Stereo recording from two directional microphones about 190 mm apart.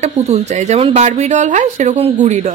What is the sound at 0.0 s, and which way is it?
Speech, 35° right (ahead or behind).